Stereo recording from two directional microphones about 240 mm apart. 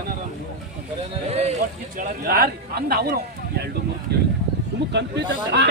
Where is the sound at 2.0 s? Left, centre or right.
Right.